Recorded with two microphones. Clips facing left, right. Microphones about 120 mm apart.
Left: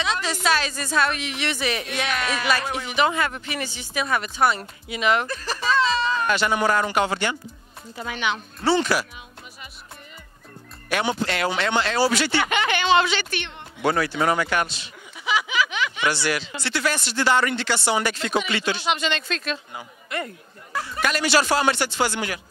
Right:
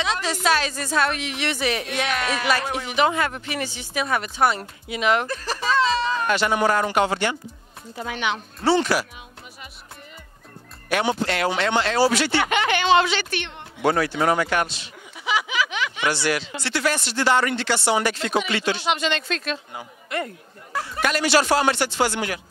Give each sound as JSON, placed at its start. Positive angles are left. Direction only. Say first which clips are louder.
{"t": 0.1, "sound": "music", "louder": "right 1 dB", "side_deg": -55}
{"t": 0.5, "sound": "speech", "louder": "right 1 dB", "side_deg": -50}
{"t": 5.7, "sound": "a sound", "louder": "even", "side_deg": -45}
{"t": 6.4, "sound": "speech", "louder": "right 2 dB", "side_deg": -40}
{"t": 11.1, "sound": "speech", "louder": "right 1 dB", "side_deg": -45}
{"t": 14.1, "sound": "a sound", "louder": "right 1 dB", "side_deg": -35}
{"t": 16.6, "sound": "speech", "louder": "right 1 dB", "side_deg": -60}